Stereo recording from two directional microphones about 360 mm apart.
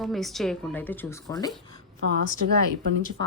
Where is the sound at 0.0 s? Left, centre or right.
Centre.